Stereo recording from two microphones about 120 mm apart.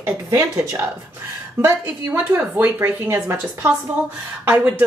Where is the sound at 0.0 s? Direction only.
25° right (ahead or behind).